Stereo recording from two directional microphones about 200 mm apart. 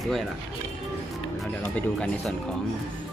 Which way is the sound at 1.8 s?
5° left (ahead or behind).